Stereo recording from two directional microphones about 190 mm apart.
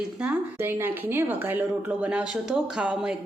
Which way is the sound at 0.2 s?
10° right (ahead or behind).